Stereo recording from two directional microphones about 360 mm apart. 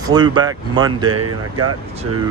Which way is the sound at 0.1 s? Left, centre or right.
Centre.